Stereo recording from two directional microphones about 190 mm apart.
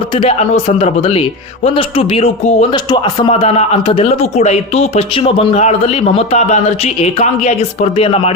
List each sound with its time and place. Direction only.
0.1 s a man's voice: 30° left (ahead or behind)
2.6 s a man's voice: 25° left (ahead or behind)